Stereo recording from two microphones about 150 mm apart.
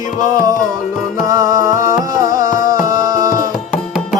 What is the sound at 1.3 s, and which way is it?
Music, 25° right (ahead or behind).